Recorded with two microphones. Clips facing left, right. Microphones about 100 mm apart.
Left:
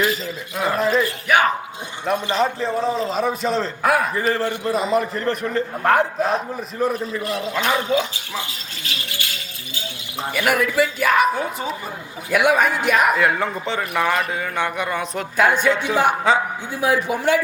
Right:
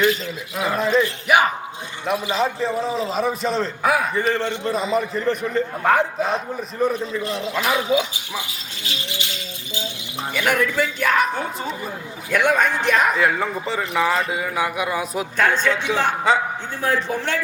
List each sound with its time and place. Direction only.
0.0 s a man's voice: centre (ahead or behind)
2.0 s a man's voice: 5° right (ahead or behind)
7.2 s speech: 30° right (ahead or behind)
7.4 s a man's voice: centre (ahead or behind)
7.9 s speech: 15° right (ahead or behind)
10.3 s a man's voice: 5° left (ahead or behind)
15.4 s speech: 10° left (ahead or behind)
16.3 s a man's voice: centre (ahead or behind)
16.8 s speech: 10° left (ahead or behind)